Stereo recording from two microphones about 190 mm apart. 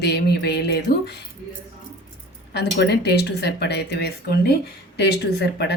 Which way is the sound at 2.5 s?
60° left (ahead or behind).